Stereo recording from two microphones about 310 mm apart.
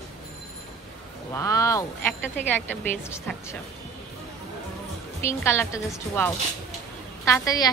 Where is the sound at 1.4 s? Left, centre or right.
Centre.